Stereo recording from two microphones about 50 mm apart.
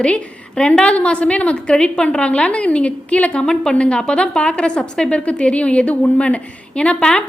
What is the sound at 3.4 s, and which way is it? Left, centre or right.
A woman's voice, centre.